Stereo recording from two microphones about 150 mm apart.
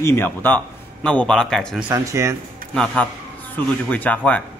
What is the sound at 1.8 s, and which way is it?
Speech, 20° right (ahead or behind).